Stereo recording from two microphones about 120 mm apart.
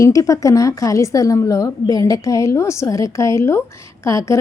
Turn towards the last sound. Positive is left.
turn(degrees=25)  # may be behind; listen again after turning